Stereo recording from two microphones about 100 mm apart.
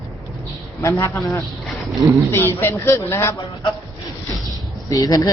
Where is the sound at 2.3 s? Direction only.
25° left (ahead or behind).